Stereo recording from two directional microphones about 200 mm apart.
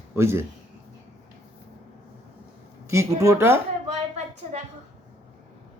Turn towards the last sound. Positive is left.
turn(degrees=-35)  # may be behind; listen again after turning